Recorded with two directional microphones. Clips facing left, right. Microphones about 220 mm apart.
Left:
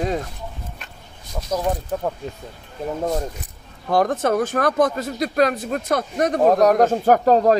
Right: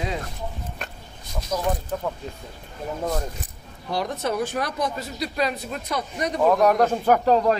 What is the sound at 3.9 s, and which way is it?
Speech, 50° left (ahead or behind).